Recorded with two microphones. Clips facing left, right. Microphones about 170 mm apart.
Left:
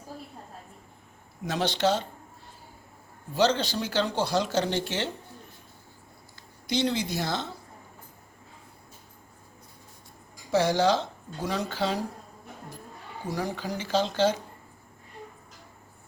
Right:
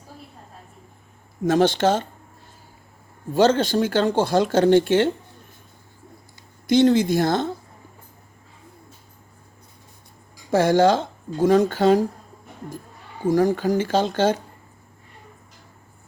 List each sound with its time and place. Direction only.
1.5 s speech: 50° right (ahead or behind)
3.3 s speech: 50° right (ahead or behind)
6.7 s speech: 50° right (ahead or behind)
10.5 s speech: 50° right (ahead or behind)
13.2 s speech: 50° right (ahead or behind)